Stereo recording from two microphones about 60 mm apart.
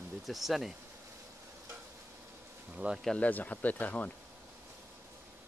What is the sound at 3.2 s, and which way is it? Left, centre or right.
Speech, left.